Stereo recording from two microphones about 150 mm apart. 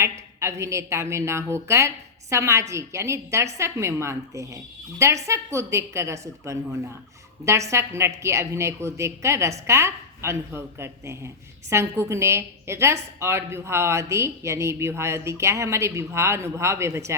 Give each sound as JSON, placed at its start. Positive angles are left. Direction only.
{"t": 0.0, "sound": "a woman's voice", "side_deg": -20}